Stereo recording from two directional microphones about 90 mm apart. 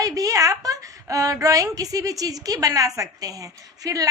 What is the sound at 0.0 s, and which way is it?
A woman's voice, 40° right (ahead or behind).